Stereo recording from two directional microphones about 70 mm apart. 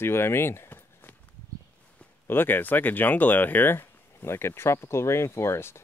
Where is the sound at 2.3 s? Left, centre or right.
Left.